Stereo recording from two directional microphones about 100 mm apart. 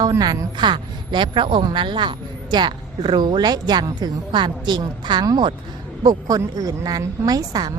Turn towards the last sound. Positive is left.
turn(degrees=-45)  # may be behind; listen again after turning